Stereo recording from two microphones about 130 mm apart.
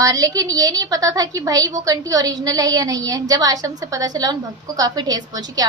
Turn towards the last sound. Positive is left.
turn(degrees=-30)  # may be behind; listen again after turning